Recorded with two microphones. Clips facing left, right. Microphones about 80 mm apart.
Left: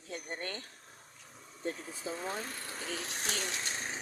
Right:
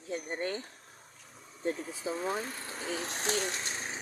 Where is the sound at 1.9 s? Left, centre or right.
Centre.